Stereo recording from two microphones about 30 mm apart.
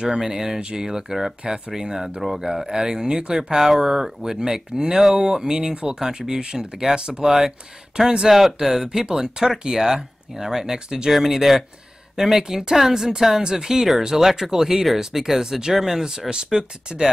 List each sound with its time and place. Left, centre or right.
0.2 s speech: centre
3.5 s speech: centre; by 7.2 s right
7.2 s speech: centre
8.0 s speech: right
8.3 s speech: centre